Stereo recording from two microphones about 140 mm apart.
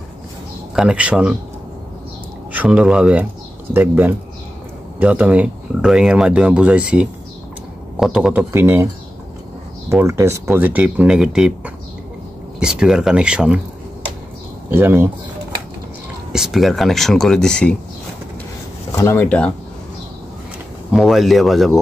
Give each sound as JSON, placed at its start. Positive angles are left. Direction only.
{"t": 0.7, "sound": "speech", "side_deg": -10}
{"t": 2.5, "sound": "speech", "side_deg": -10}
{"t": 9.8, "sound": "speech", "side_deg": -20}
{"t": 14.7, "sound": "speech", "side_deg": -15}
{"t": 16.3, "sound": "speech", "side_deg": -5}
{"t": 18.9, "sound": "speech", "side_deg": 20}
{"t": 20.9, "sound": "speech", "side_deg": 0}